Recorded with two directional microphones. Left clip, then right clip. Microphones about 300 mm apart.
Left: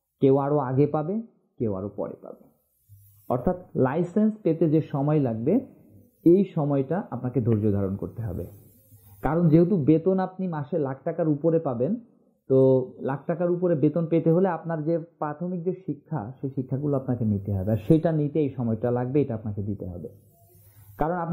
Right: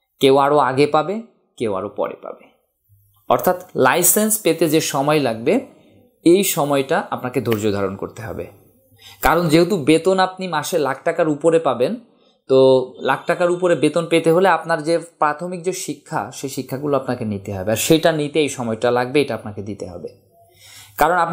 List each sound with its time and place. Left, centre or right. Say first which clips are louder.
0.2 s speech: right 9 dB; centre
12.7 s speech: right 8 dB; right
13.0 s speech: right 10 dB; centre
20.9 s speech: right 12 dB; centre